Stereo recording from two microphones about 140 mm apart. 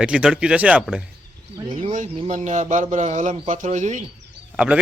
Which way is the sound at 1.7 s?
60° right (ahead or behind).